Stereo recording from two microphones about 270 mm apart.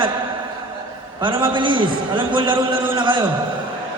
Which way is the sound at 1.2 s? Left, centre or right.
Centre.